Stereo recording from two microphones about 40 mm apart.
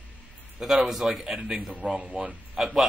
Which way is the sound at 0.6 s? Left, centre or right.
Centre.